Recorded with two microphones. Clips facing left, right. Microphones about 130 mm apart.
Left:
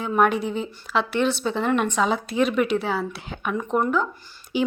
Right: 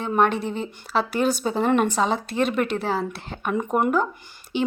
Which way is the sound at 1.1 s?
40° right (ahead or behind).